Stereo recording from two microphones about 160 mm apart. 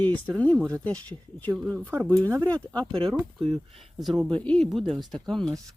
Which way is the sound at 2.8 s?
35° right (ahead or behind).